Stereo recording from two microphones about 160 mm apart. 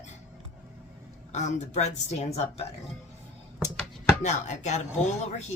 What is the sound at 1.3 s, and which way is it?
Speech, 45° left (ahead or behind).